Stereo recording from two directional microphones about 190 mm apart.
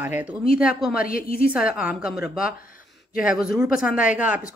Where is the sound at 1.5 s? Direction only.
5° right (ahead or behind).